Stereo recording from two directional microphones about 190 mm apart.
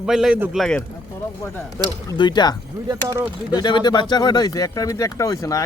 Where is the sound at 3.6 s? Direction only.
20° left (ahead or behind).